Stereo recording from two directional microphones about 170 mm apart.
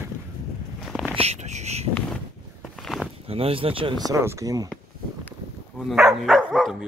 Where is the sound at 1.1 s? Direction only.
40° right (ahead or behind).